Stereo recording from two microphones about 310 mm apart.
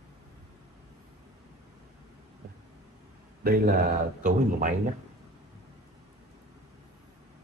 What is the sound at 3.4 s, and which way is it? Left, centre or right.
Speech, right.